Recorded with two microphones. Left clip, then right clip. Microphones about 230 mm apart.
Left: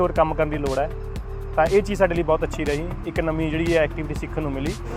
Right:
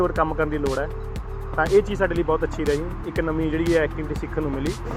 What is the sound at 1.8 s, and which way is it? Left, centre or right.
Speech, left.